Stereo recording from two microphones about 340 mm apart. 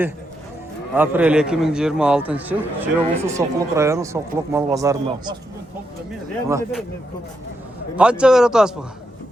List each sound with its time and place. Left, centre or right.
0.9 s a man's voice: centre
6.5 s a man's voice: centre
7.9 s a man's voice: centre